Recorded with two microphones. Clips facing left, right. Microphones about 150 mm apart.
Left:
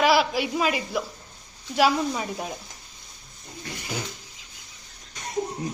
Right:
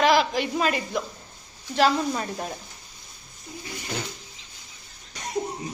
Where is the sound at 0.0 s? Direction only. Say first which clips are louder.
Even; 5° left (ahead or behind).